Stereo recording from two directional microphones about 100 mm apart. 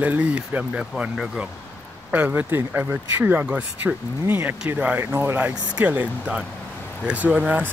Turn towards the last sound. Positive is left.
turn(degrees=-15)  # may be behind; listen again after turning